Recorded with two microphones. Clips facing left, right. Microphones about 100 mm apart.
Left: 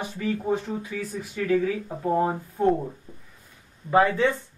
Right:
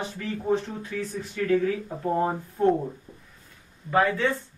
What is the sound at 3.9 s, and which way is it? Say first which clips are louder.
Speech: left 3 dB; 20° left (ahead or behind).